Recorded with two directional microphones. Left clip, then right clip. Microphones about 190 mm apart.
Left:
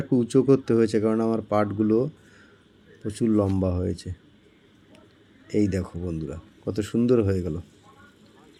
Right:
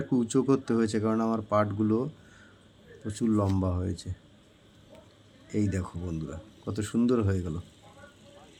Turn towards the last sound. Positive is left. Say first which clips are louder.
# left 7 dB
turn(degrees=10)  # may be behind; listen again after turning